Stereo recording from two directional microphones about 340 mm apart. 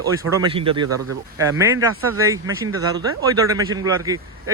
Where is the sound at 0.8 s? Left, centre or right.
Right.